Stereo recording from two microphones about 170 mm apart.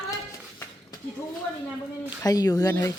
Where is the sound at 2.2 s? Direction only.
20° left (ahead or behind).